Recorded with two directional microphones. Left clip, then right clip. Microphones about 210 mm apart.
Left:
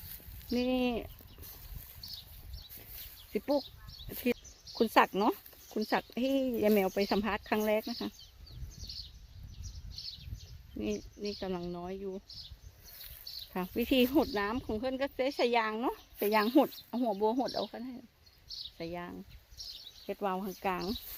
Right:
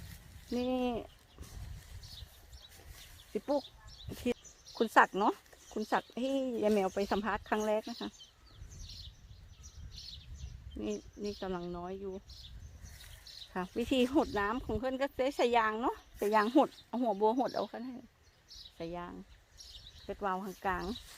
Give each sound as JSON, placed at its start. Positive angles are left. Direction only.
{"t": 0.5, "sound": "speech", "side_deg": 10}
{"t": 3.3, "sound": "speech", "side_deg": 10}
{"t": 10.8, "sound": "speech", "side_deg": 10}
{"t": 13.5, "sound": "speech", "side_deg": 15}
{"t": 18.4, "sound": "a sound", "side_deg": 5}
{"t": 20.1, "sound": "speech", "side_deg": 15}